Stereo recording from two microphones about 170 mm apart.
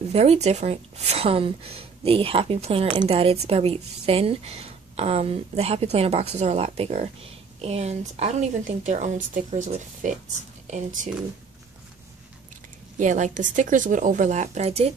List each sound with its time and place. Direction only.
0.1 s a woman's voice: 40° right (ahead or behind)
13.0 s a woman's voice: 45° right (ahead or behind)